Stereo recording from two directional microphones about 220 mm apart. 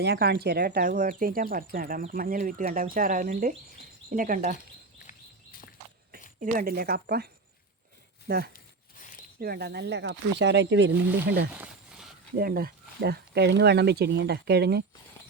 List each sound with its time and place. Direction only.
0.0 s speech: 50° right (ahead or behind)
5.0 s a sound: 40° left (ahead or behind)
6.4 s speech: 40° right (ahead or behind)
8.3 s speech: 40° right (ahead or behind)
11.5 s a sound: 5° right (ahead or behind)
12.4 s speech: 40° right (ahead or behind)